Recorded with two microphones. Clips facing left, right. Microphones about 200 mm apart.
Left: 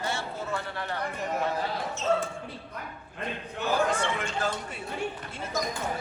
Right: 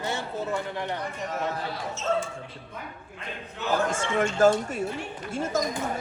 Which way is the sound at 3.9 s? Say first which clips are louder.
Right 4 dB; 45° right (ahead or behind).